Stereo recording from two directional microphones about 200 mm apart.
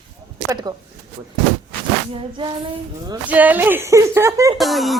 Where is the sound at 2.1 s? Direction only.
25° right (ahead or behind).